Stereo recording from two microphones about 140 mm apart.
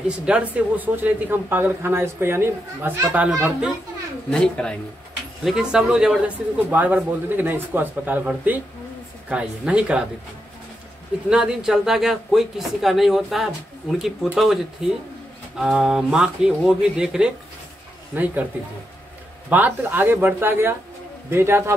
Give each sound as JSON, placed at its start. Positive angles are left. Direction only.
{"t": 0.2, "sound": "a man's voice", "side_deg": -10}
{"t": 4.3, "sound": "speech", "side_deg": 5}
{"t": 5.4, "sound": "a man's voice", "side_deg": -5}
{"t": 11.2, "sound": "a man's voice", "side_deg": -5}
{"t": 19.5, "sound": "a man's voice", "side_deg": -15}